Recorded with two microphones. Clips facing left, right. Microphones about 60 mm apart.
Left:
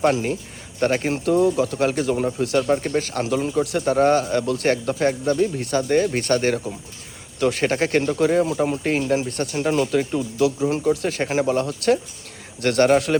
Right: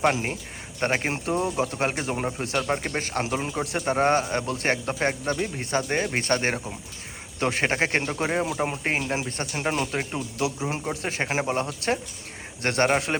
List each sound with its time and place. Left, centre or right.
0.0 s speech: right